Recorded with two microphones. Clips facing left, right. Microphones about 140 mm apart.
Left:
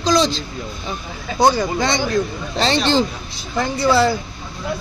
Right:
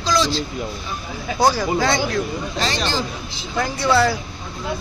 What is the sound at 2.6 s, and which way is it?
Speech, 25° left (ahead or behind).